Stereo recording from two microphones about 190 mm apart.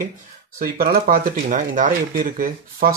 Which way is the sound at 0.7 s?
55° right (ahead or behind).